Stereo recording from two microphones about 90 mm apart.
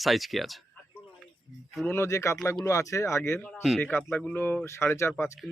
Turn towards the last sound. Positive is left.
turn(degrees=5)  # may be behind; listen again after turning